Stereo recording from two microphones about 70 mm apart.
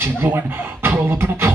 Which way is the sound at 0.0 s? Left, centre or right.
Right.